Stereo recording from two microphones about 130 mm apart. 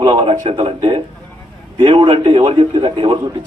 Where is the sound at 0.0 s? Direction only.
45° right (ahead or behind).